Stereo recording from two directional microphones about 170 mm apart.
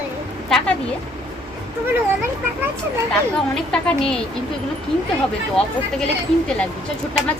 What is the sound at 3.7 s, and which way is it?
Speech, 5° left (ahead or behind).